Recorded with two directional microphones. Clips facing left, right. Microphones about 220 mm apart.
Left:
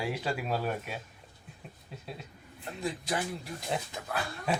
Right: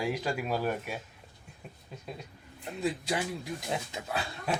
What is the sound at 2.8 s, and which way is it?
Speech, 15° right (ahead or behind).